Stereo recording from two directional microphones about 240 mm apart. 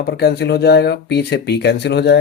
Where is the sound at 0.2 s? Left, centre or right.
Left.